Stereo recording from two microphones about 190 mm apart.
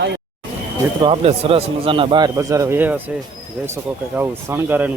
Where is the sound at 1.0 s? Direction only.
30° right (ahead or behind); by 3.0 s 10° right (ahead or behind).